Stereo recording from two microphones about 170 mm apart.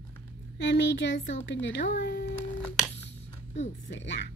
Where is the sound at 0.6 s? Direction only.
90° left.